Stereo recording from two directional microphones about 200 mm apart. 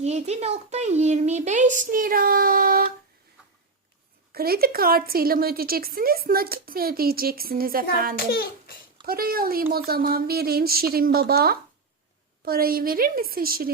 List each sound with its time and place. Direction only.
0.0 s a child's voice: 35° right (ahead or behind)
4.3 s a woman's voice: 50° right (ahead or behind)
8.3 s a child's voice: 50° left (ahead or behind)
9.0 s a woman's voice: 50° right (ahead or behind)